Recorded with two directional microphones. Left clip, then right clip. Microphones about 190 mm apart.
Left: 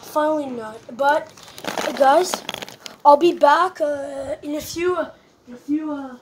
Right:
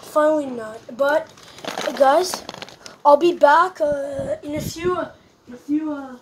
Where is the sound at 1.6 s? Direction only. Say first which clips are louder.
Left 2 dB; 25° left (ahead or behind).